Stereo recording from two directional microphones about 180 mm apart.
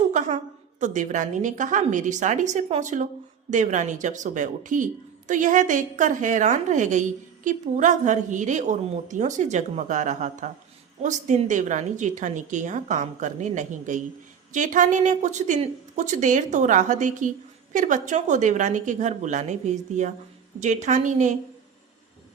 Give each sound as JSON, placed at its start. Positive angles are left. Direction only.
{"t": 0.1, "sound": "a woman's voice", "side_deg": -40}